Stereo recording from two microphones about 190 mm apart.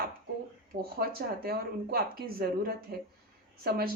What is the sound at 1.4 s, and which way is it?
Speech, 55° right (ahead or behind).